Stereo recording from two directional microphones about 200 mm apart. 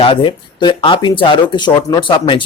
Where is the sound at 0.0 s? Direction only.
25° left (ahead or behind).